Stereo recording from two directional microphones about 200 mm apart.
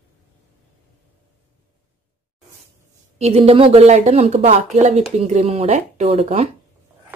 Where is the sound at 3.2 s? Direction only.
30° right (ahead or behind).